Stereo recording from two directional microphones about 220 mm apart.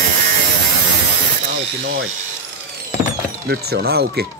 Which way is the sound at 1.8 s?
55° right (ahead or behind).